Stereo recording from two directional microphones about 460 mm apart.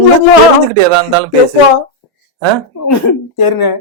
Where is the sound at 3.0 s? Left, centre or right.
Left.